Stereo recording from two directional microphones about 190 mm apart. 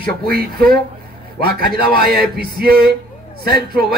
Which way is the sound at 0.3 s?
50° right (ahead or behind).